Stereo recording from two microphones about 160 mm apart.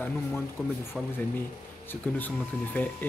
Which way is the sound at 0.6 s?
Centre (ahead or behind).